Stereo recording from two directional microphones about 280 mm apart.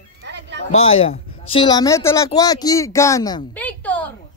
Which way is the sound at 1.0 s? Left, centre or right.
Centre.